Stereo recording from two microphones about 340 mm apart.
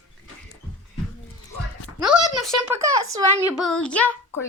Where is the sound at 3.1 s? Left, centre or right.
Centre.